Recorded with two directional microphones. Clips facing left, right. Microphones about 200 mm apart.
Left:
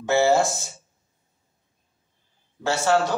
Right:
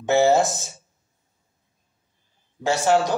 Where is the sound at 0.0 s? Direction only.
20° right (ahead or behind).